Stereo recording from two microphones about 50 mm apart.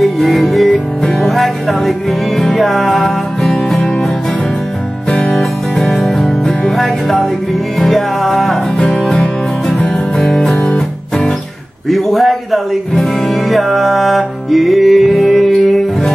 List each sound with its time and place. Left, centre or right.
0.0 s music: centre
5.1 s music: left
5.4 s music: centre
9.1 s music: centre
11.9 s speech: centre